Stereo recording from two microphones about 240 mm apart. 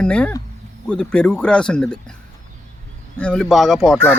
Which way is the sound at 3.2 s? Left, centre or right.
Centre.